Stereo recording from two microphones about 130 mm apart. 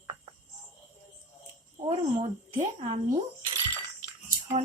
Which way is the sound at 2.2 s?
60° right (ahead or behind).